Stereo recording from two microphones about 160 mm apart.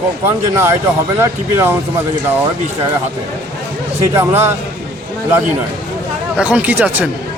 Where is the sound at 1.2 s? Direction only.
15° right (ahead or behind).